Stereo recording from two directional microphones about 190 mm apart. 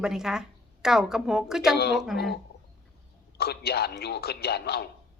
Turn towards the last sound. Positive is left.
turn(degrees=55)  # may be behind; listen again after turning